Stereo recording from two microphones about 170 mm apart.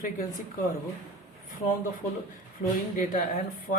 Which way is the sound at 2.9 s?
55° left (ahead or behind).